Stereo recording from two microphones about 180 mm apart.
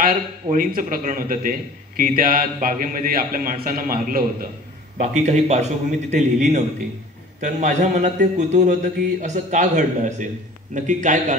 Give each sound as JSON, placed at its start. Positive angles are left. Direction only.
{"t": 0.0, "sound": "a man's voice", "side_deg": -50}
{"t": 5.0, "sound": "a man's voice", "side_deg": -40}